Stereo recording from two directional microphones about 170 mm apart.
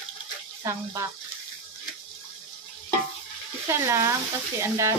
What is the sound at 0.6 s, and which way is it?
Stir, 15° right (ahead or behind).